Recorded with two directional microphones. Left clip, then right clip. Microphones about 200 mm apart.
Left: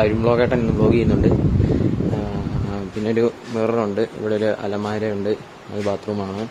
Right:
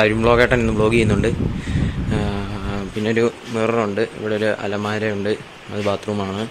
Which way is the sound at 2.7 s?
5° left (ahead or behind).